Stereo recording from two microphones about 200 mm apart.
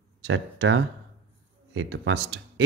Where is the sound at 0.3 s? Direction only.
70° right (ahead or behind).